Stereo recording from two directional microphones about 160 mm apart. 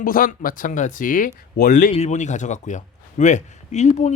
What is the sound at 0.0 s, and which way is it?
Speech, 60° left (ahead or behind).